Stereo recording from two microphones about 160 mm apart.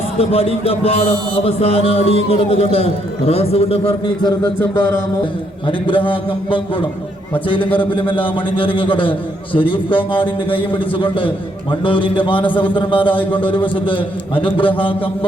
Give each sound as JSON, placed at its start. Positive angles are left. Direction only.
{"t": 0.2, "sound": "speech", "side_deg": 40}
{"t": 5.6, "sound": "speech", "side_deg": 30}